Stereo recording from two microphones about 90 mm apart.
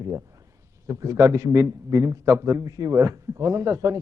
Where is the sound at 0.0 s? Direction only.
40° right (ahead or behind).